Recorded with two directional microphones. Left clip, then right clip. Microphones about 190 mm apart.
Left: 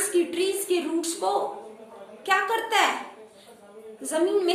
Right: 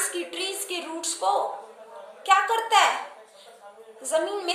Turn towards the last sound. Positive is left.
turn(degrees=-15)  # may be behind; listen again after turning